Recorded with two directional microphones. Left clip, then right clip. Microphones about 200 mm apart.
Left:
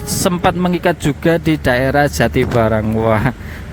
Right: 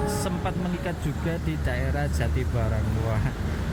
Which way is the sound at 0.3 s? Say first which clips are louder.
Left 15 dB; 55° left (ahead or behind).